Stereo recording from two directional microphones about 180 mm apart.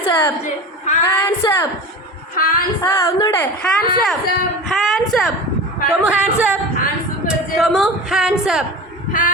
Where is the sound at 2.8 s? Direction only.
15° left (ahead or behind).